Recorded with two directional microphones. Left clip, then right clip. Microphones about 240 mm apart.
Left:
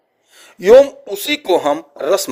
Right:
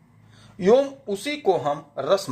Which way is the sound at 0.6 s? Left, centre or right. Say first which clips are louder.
Left 10 dB; left.